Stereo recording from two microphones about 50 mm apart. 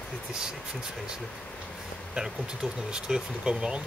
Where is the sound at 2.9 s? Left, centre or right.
Centre.